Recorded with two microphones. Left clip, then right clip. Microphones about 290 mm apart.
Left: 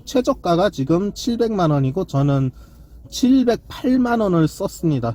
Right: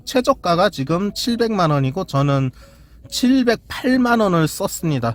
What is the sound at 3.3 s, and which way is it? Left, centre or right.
Speech, right.